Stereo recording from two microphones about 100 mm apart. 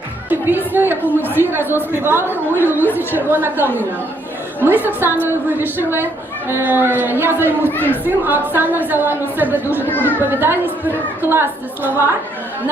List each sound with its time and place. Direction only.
0.3 s a woman's voice: 20° right (ahead or behind)
9.9 s speech: 20° left (ahead or behind)
10.2 s a woman's voice: 20° right (ahead or behind)